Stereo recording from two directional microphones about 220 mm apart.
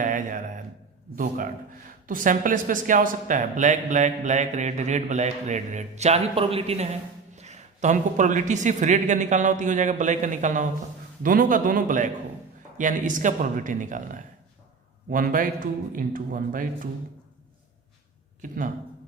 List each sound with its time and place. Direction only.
0.0 s a sound: 40° right (ahead or behind)
1.1 s speech: 40° right (ahead or behind)
18.4 s speech: 35° right (ahead or behind)